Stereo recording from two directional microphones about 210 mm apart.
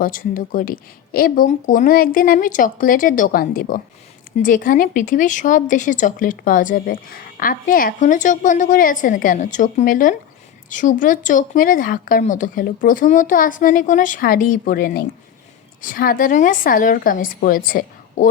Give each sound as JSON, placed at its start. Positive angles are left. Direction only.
{"t": 0.0, "sound": "speech", "side_deg": 40}